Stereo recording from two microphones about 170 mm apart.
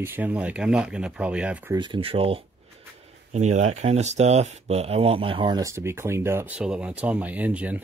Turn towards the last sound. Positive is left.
turn(degrees=-10)  # may be behind; listen again after turning